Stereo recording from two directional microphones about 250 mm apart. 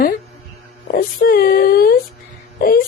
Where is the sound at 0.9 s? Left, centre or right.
Left.